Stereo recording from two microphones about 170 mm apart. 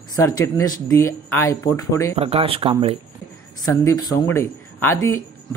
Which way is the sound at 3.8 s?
20° left (ahead or behind).